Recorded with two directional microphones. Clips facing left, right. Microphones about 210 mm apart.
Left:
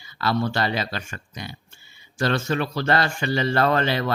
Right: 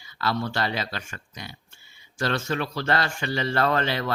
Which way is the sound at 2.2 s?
30° left (ahead or behind).